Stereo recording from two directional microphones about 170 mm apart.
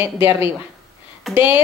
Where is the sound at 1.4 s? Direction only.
15° right (ahead or behind).